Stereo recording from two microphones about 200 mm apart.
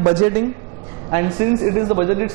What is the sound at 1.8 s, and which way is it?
Speech, 25° right (ahead or behind).